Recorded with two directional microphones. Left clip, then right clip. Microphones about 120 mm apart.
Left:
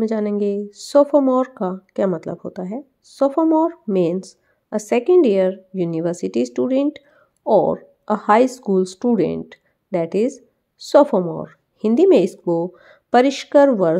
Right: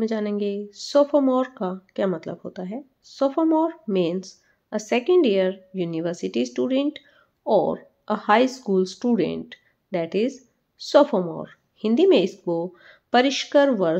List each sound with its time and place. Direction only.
0.0 s speech: 45° left (ahead or behind)